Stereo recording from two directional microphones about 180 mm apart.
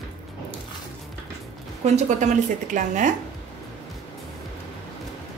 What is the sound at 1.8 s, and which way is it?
A woman's voice, 40° right (ahead or behind).